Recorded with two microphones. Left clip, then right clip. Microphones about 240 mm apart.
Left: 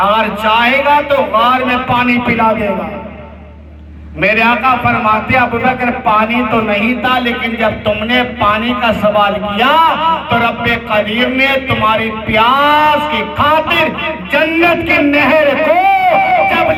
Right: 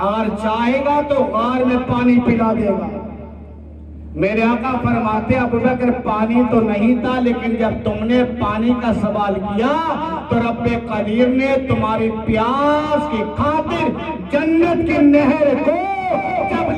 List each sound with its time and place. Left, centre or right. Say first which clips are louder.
0.0 s a man's voice: left 8 dB; centre
4.2 s a man's voice: left 7 dB; centre